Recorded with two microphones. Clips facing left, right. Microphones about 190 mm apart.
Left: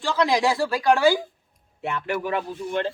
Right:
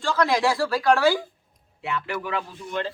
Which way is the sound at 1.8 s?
50° left (ahead or behind).